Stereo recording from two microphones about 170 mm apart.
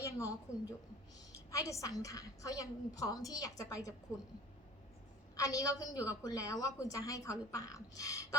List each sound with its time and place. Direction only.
0.0 s a woman's voice: 20° left (ahead or behind)
1.5 s a woman's voice: 20° left (ahead or behind)
5.4 s a woman's voice: 20° left (ahead or behind)